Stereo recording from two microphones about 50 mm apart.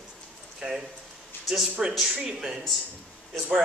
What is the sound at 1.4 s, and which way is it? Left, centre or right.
Speech, centre.